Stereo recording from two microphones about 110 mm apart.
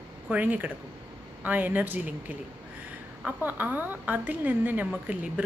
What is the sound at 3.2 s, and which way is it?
A woman's voice, 15° right (ahead or behind).